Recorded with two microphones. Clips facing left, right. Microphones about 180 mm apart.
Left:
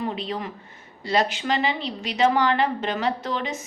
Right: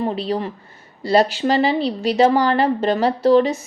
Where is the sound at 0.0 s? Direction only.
35° right (ahead or behind).